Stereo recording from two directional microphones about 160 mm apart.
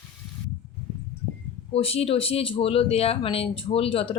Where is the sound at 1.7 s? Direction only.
40° left (ahead or behind).